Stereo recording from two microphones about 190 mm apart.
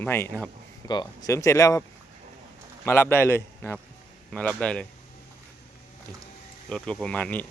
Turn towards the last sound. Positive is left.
turn(degrees=10)  # may be behind; listen again after turning